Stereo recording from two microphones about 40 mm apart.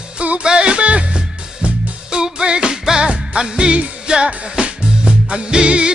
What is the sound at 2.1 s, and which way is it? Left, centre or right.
Music, right.